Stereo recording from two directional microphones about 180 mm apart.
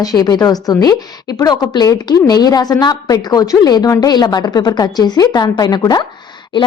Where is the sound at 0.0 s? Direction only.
20° left (ahead or behind).